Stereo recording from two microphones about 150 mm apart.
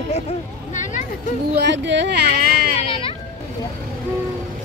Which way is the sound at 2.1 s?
90° right.